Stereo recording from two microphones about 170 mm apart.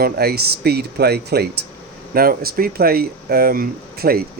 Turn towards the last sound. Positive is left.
turn(degrees=-65)  # may be behind; listen again after turning